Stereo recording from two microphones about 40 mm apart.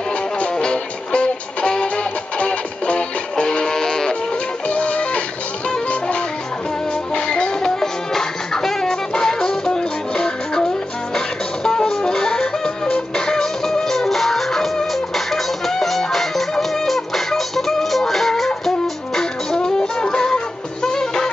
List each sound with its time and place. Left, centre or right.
0.4 s music: left
3.4 s music: centre
4.6 s music: left
7.2 s music: left
19.1 s music: centre